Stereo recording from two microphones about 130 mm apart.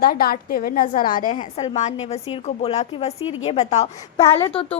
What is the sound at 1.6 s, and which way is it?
A woman's voice, 60° left (ahead or behind).